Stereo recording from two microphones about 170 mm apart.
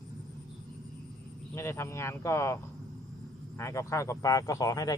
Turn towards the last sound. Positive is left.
turn(degrees=20)  # may be behind; listen again after turning